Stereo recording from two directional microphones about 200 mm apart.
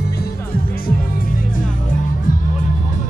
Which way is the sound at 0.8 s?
45° left (ahead or behind).